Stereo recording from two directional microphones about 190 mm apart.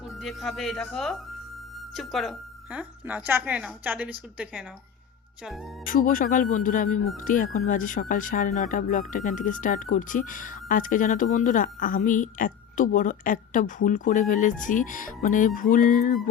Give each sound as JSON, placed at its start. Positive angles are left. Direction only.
{"t": 0.0, "sound": "a woman's voice", "side_deg": 0}
{"t": 5.8, "sound": "speech", "side_deg": 45}